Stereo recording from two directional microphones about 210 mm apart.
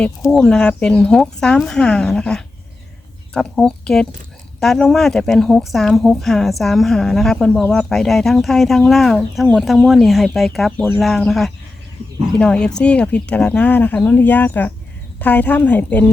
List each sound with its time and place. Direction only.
0.0 s speech: 5° left (ahead or behind)